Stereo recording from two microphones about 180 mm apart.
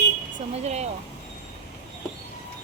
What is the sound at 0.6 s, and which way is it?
Speech, 40° right (ahead or behind).